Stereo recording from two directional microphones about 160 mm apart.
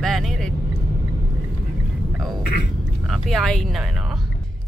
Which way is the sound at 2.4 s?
75° left (ahead or behind).